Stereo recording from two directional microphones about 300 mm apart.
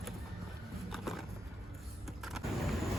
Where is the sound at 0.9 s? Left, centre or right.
Centre.